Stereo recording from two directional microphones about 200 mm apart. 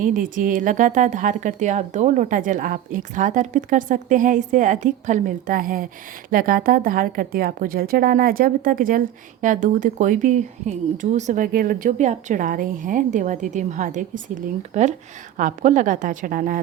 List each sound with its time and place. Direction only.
0.0 s a woman's voice: 40° right (ahead or behind)